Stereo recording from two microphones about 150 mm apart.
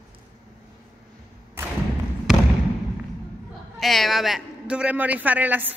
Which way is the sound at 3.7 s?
Centre (ahead or behind).